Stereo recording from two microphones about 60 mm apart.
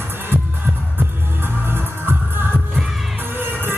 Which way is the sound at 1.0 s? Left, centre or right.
Right.